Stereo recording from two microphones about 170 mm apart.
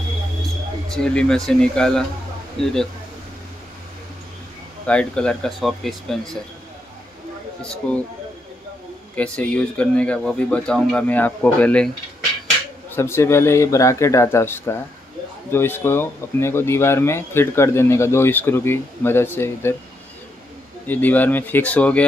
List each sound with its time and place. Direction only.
0.8 s speech: 5° left (ahead or behind)
4.8 s speech: 5° left (ahead or behind)
7.6 s speech: 5° left (ahead or behind)
9.1 s speech: 5° left (ahead or behind)
12.9 s speech: 15° left (ahead or behind)
20.8 s speech: 10° left (ahead or behind)